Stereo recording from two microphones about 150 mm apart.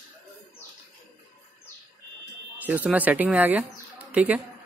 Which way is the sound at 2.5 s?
10° right (ahead or behind).